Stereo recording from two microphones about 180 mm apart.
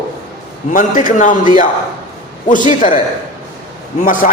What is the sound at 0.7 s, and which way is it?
A man's voice, 45° left (ahead or behind).